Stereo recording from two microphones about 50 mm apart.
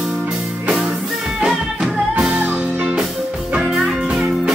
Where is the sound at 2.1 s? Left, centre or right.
Right.